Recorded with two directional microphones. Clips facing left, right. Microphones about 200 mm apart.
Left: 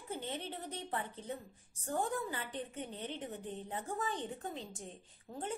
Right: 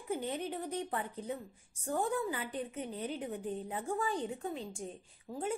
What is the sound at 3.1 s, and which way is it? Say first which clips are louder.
A woman's voice: right 5 dB; 10° right (ahead or behind).